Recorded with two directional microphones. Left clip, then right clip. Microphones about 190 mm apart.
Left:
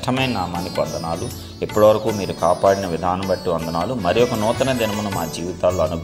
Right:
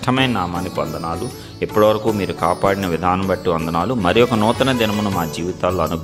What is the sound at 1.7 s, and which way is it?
Speech, 20° right (ahead or behind).